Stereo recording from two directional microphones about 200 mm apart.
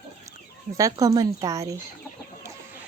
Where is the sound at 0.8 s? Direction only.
15° right (ahead or behind).